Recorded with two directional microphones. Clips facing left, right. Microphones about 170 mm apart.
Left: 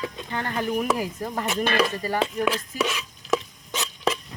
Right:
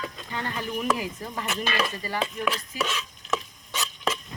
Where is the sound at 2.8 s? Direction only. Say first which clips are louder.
Left 3 dB; 10° left (ahead or behind).